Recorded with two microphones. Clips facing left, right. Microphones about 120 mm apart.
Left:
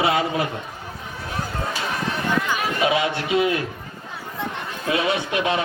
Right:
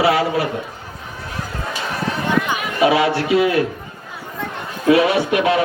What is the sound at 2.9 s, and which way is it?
Speech, 20° left (ahead or behind).